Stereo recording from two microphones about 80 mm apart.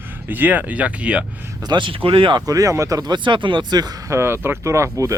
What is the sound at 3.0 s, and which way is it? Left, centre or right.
Speech, right.